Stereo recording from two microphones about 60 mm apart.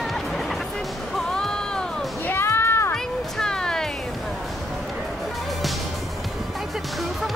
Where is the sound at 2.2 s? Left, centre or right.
Left.